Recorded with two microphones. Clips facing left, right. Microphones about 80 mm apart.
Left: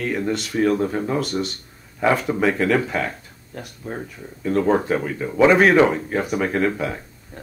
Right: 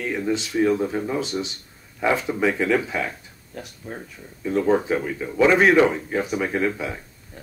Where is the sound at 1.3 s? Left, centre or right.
Centre.